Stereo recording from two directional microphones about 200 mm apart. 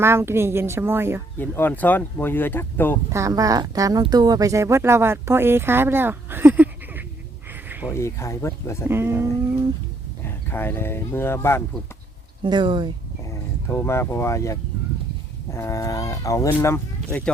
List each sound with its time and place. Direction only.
0.0 s speech: 15° right (ahead or behind)
1.4 s speech: 10° left (ahead or behind)
3.1 s speech: 15° right (ahead or behind)
7.7 s a sound: 10° right (ahead or behind)
7.9 s speech: 15° left (ahead or behind)
8.9 s speech: 10° right (ahead or behind)
10.5 s speech: 10° left (ahead or behind)
12.4 s speech: 25° right (ahead or behind)
13.2 s speech: 15° left (ahead or behind)